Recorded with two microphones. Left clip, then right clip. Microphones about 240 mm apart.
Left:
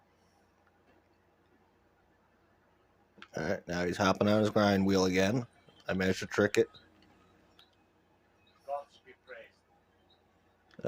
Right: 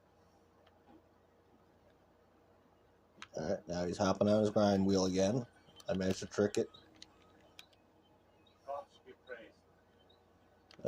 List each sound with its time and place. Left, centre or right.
3.3 s speech: left